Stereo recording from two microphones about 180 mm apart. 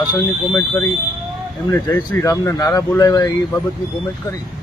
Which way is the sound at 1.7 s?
15° left (ahead or behind).